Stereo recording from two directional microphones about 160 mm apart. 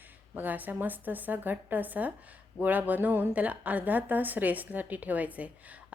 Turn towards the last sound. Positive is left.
turn(degrees=-10)  # may be behind; listen again after turning